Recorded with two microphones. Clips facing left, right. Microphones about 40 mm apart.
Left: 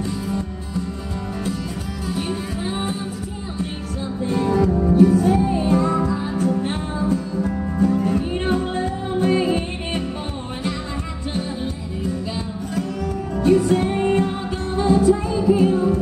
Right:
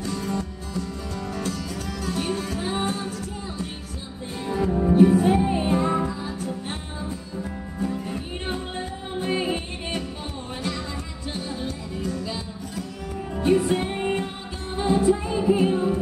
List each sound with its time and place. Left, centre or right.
0.0 s music: centre
2.0 s music: centre
6.3 s music: left
7.8 s music: left
11.6 s music: centre